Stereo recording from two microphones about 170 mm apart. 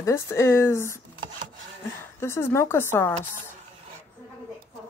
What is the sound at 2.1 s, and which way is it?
Speech, 15° left (ahead or behind).